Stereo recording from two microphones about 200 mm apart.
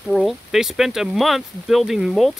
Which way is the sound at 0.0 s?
Centre (ahead or behind).